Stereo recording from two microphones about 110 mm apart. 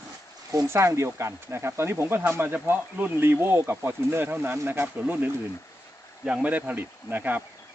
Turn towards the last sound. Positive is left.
turn(degrees=-15)  # may be behind; listen again after turning